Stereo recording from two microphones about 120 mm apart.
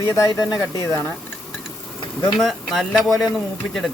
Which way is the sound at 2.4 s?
Centre (ahead or behind).